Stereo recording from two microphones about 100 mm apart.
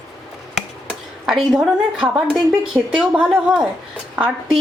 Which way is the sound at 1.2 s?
5° right (ahead or behind).